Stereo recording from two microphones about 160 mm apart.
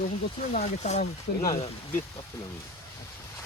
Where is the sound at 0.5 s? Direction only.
45° left (ahead or behind).